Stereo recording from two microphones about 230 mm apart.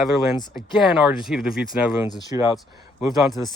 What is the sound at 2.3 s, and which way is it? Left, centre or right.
Speech, centre.